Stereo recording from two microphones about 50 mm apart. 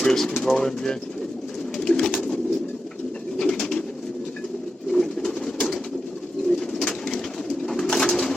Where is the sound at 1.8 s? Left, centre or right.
Centre.